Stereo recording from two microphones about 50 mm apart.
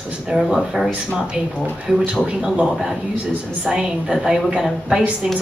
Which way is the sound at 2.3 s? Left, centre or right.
Centre.